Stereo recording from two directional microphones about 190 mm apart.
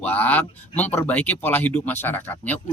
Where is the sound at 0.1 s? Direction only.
10° left (ahead or behind).